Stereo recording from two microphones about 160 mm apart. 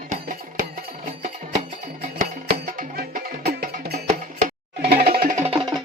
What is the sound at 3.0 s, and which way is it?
Music, 70° right (ahead or behind).